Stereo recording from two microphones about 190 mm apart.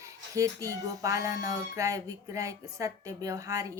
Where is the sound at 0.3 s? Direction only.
15° right (ahead or behind).